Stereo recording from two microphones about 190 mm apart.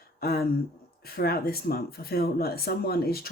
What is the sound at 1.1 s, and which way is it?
Speech, 50° left (ahead or behind).